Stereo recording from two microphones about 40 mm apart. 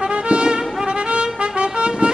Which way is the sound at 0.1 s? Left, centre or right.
Right.